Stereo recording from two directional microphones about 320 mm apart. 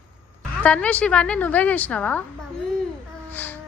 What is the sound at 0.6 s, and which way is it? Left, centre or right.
A woman's voice, centre.